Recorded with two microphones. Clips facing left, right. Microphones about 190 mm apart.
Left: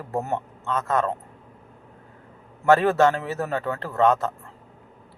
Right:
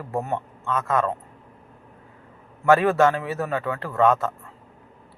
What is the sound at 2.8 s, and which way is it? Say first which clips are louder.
Speech: even; 35° left (ahead or behind).